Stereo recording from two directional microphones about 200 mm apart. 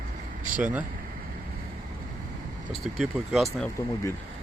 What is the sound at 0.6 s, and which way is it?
Speech, 10° right (ahead or behind).